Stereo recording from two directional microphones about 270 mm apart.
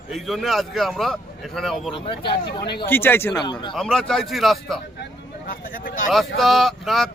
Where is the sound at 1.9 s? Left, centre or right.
Centre.